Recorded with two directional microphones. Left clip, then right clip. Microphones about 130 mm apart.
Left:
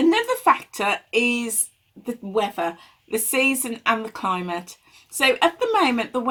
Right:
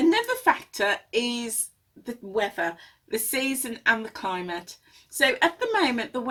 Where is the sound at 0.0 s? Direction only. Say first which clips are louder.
Left 3 dB; 15° left (ahead or behind).